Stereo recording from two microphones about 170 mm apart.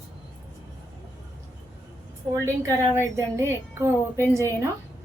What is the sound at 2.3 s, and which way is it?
Speech, 15° right (ahead or behind).